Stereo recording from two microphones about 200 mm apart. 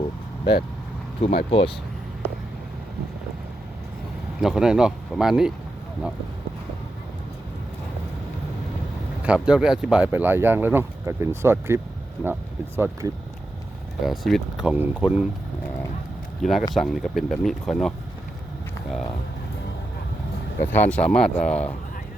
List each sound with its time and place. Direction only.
1.5 s speech: 30° left (ahead or behind)
4.4 s speech: 5° right (ahead or behind)
9.2 s speech: 5° right (ahead or behind)
14.0 s speech: centre (ahead or behind)
16.4 s speech: centre (ahead or behind)
20.6 s speech: 10° left (ahead or behind)